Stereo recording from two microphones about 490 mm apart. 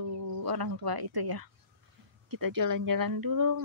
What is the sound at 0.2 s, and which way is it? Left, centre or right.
Speech, right.